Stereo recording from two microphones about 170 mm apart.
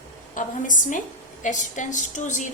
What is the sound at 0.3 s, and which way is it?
A woman's voice, 50° left (ahead or behind).